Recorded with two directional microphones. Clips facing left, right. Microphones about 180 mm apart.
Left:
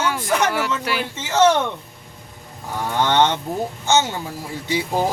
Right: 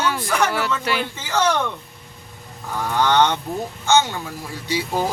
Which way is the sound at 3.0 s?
20° left (ahead or behind).